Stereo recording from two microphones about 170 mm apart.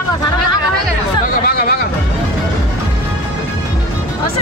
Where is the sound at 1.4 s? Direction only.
65° left (ahead or behind).